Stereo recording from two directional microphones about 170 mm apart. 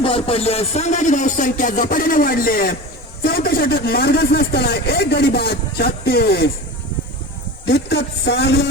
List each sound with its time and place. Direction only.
0.0 s speech: 35° left (ahead or behind); by 6.5 s 70° left (ahead or behind)
7.6 s a man's voice: 85° left